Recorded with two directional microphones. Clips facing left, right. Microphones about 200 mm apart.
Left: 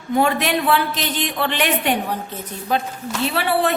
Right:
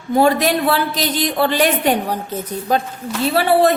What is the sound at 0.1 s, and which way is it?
A woman's voice, 35° right (ahead or behind).